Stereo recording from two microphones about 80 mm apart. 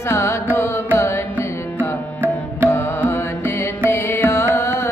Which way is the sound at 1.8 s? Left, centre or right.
Right.